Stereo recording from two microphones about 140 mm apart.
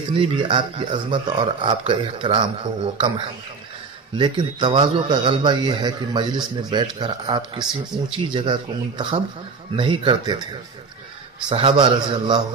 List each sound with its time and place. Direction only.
0.2 s a man's voice: 35° right (ahead or behind)
11.4 s a man's voice: 35° right (ahead or behind)